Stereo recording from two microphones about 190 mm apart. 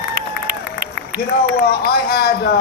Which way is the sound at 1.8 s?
55° left (ahead or behind).